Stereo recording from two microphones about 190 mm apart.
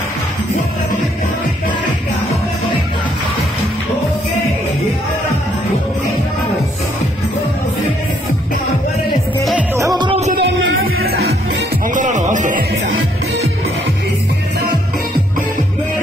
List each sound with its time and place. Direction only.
9.8 s music: 20° right (ahead or behind)
10.3 s music: 75° right (ahead or behind)
11.0 s music: 55° right (ahead or behind)
11.9 s music: 40° right (ahead or behind)